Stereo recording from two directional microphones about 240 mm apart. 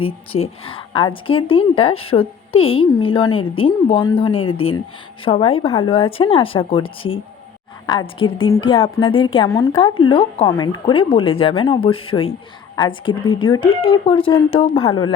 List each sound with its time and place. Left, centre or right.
0.0 s speech: left
4.4 s speech: left
5.2 s speech: left